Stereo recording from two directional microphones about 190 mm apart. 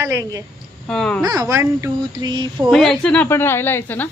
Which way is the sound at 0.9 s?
5° left (ahead or behind).